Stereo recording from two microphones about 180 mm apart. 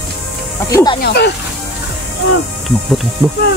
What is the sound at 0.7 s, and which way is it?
Speech, 20° left (ahead or behind).